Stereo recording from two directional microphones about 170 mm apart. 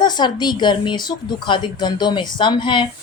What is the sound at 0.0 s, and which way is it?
A woman's voice, 25° left (ahead or behind).